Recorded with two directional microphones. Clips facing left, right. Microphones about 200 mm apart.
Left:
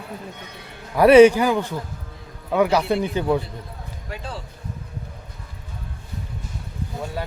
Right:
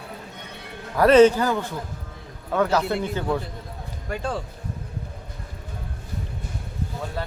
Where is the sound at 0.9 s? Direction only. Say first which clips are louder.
Left 3 dB; 15° left (ahead or behind).